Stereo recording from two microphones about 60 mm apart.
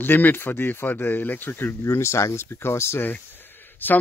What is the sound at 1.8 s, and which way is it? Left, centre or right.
Speech, left.